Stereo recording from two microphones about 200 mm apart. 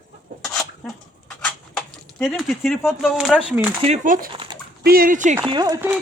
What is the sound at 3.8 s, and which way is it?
Speech, 35° right (ahead or behind).